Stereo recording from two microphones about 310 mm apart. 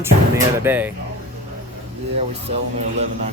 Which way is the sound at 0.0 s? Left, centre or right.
Centre.